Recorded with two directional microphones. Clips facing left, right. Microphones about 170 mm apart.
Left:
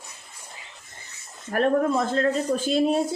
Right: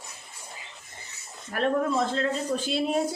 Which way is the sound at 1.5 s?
50° left (ahead or behind).